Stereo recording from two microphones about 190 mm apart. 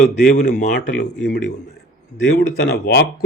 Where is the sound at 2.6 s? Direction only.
60° left (ahead or behind).